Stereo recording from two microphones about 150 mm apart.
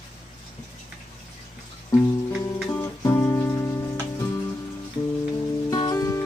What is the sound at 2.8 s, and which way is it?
Music, 25° left (ahead or behind).